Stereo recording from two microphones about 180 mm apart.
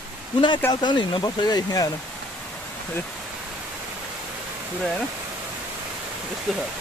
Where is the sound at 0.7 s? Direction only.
25° left (ahead or behind).